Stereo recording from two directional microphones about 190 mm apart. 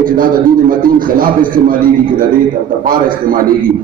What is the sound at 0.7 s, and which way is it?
A man's voice, 45° right (ahead or behind).